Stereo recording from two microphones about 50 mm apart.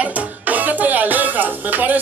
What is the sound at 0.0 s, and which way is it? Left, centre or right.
Music, right.